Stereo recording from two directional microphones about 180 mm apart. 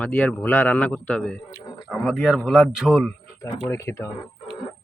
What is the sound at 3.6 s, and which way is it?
Speech, 15° left (ahead or behind).